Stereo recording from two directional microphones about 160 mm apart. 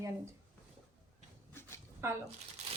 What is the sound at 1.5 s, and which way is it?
Dog, 15° left (ahead or behind).